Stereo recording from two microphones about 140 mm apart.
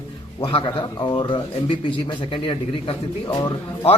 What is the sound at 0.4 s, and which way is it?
A man's voice, 40° left (ahead or behind).